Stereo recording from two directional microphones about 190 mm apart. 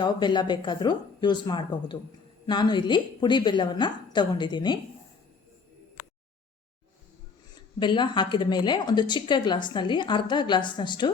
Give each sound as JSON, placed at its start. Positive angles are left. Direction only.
{"t": 0.0, "sound": "a woman's voice", "side_deg": 25}
{"t": 7.8, "sound": "a woman's voice", "side_deg": 25}